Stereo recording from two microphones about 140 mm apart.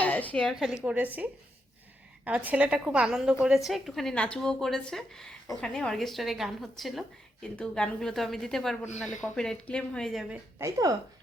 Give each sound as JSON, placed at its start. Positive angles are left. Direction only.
{"t": 0.0, "sound": "a sound", "side_deg": 10}
{"t": 0.5, "sound": "a woman's voice", "side_deg": -5}
{"t": 10.6, "sound": "speech", "side_deg": -25}